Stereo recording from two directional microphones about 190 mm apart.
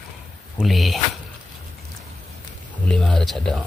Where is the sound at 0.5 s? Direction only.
Centre (ahead or behind).